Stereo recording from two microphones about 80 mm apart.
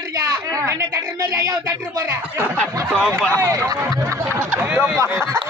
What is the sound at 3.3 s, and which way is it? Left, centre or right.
A woman's voice, right.